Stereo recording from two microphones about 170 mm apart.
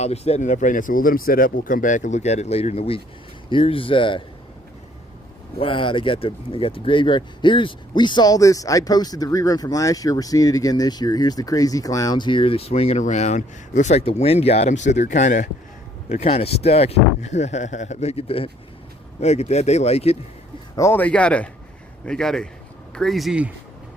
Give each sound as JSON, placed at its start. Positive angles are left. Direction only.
{"t": 0.0, "sound": "speech", "side_deg": 40}
{"t": 5.5, "sound": "speech", "side_deg": 30}
{"t": 20.7, "sound": "speech", "side_deg": 15}